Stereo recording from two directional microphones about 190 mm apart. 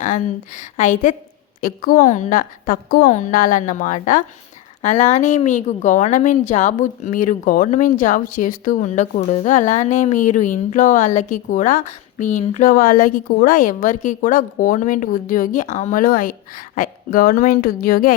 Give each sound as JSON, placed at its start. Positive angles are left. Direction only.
{"t": 0.0, "sound": "a woman's voice", "side_deg": 40}